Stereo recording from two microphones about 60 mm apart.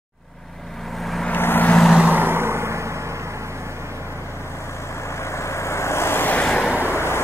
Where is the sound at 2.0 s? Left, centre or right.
Right.